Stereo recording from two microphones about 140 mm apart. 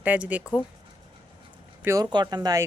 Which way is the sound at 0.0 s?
10° right (ahead or behind).